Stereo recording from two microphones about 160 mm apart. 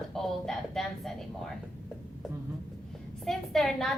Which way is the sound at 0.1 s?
Centre (ahead or behind).